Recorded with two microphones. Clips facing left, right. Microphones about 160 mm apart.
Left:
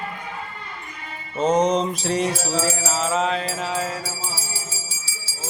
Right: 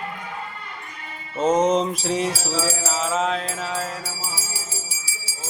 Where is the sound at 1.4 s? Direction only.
5° right (ahead or behind).